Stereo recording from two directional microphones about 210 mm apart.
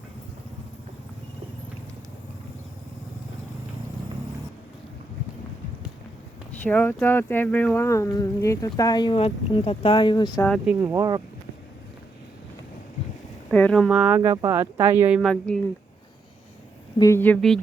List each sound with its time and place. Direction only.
6.6 s speech: 10° left (ahead or behind)
10.4 s speech: 5° left (ahead or behind)
10.8 s speech: 10° right (ahead or behind)
13.5 s speech: 5° left (ahead or behind)
14.2 s speech: 15° right (ahead or behind); by 15.6 s 5° left (ahead or behind)
17.0 s speech: 10° left (ahead or behind)